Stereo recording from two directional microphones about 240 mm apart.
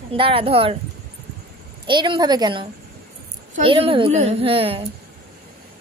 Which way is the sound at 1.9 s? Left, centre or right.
Centre.